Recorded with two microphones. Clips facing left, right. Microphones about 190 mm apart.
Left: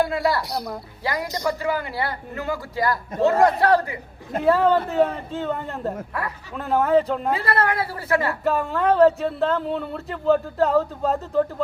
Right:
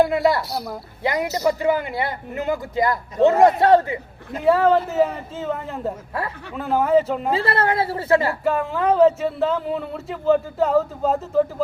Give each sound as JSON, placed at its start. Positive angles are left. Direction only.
{"t": 0.0, "sound": "speech", "side_deg": -20}
{"t": 0.4, "sound": "speech", "side_deg": 0}
{"t": 1.0, "sound": "a man's voice", "side_deg": -20}
{"t": 4.4, "sound": "speech", "side_deg": 0}
{"t": 6.1, "sound": "a man's voice", "side_deg": -25}
{"t": 6.5, "sound": "speech", "side_deg": 0}
{"t": 7.3, "sound": "a man's voice", "side_deg": -25}
{"t": 8.4, "sound": "speech", "side_deg": 0}